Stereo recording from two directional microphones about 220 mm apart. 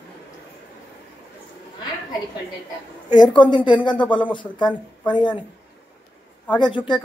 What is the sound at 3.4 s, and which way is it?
Speech, 20° left (ahead or behind).